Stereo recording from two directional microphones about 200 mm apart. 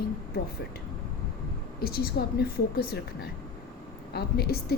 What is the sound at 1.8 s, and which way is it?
Speech, 50° left (ahead or behind).